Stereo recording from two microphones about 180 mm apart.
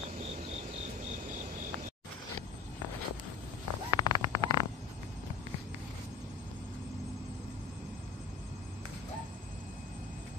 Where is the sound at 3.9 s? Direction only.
25° left (ahead or behind).